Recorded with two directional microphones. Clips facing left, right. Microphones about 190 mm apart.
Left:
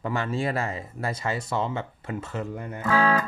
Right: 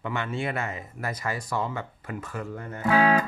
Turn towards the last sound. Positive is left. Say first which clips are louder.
# right 1 dB
turn(degrees=-15)  # may be behind; listen again after turning